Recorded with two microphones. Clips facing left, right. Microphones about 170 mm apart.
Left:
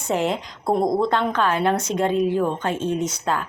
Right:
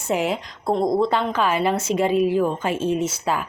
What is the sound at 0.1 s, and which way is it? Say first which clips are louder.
A woman's voice: even; 5° right (ahead or behind).